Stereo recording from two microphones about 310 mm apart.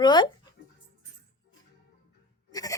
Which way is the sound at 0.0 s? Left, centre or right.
Centre.